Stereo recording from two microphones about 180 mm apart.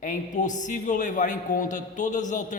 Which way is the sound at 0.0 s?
45° left (ahead or behind).